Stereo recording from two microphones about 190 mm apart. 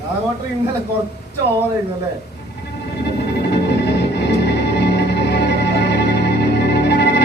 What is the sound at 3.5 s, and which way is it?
Music, 60° left (ahead or behind).